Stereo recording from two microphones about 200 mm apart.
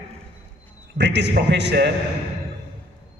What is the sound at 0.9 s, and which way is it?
Speech, 60° right (ahead or behind).